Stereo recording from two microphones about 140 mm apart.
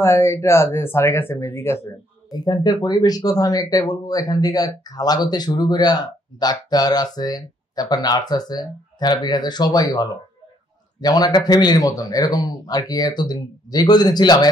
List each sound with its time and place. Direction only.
0.0 s speech: 20° left (ahead or behind)
2.4 s speech: 30° left (ahead or behind)